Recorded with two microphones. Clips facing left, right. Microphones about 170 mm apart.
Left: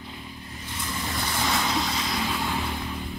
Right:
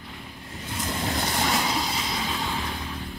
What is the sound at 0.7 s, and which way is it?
Vehicle, 50° right (ahead or behind).